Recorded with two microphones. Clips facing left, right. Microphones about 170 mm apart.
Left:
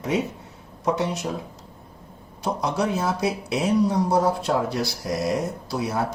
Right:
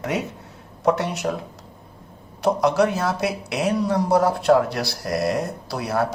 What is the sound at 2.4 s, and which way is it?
Speech, 70° right (ahead or behind).